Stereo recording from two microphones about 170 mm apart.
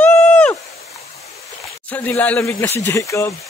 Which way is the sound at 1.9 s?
10° left (ahead or behind).